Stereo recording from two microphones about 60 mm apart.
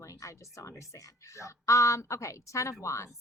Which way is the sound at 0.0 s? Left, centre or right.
Left.